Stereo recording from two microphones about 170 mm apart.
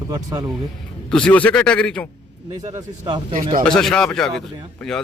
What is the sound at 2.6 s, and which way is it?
Speech, 25° right (ahead or behind).